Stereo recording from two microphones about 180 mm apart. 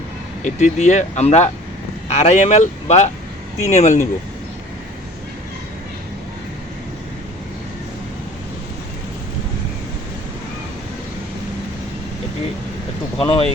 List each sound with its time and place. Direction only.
0.4 s speech: 40° left (ahead or behind)
13.1 s speech: 30° left (ahead or behind)